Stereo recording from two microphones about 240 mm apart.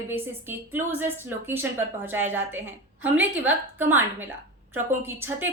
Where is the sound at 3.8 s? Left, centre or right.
Centre.